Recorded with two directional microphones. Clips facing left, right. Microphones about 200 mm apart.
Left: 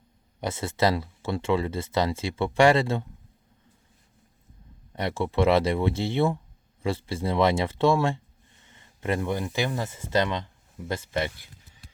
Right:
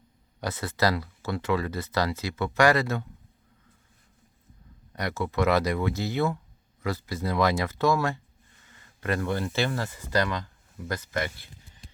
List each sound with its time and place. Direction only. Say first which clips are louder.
0.3 s speech: left 2 dB; 25° left (ahead or behind)
4.9 s speech: left 3 dB; 25° left (ahead or behind)